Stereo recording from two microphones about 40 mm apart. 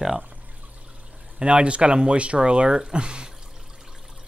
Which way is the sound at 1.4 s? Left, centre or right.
Right.